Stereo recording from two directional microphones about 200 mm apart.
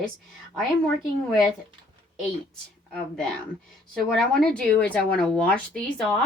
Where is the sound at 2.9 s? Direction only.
5° left (ahead or behind).